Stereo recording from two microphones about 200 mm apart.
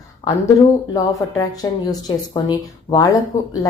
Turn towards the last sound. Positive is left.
turn(degrees=20)  # may be behind; listen again after turning